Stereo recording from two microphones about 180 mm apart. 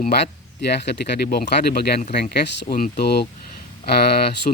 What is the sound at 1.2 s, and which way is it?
Speech, 60° left (ahead or behind).